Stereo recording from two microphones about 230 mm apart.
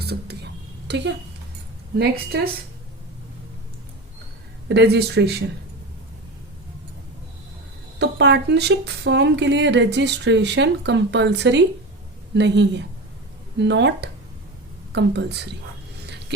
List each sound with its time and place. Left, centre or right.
0.0 s speech: right
4.7 s speech: right
7.9 s speech: right